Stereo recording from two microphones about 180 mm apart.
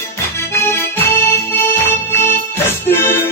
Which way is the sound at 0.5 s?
15° left (ahead or behind).